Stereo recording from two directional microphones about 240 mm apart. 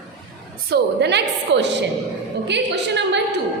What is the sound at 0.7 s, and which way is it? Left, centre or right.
A woman's voice, right.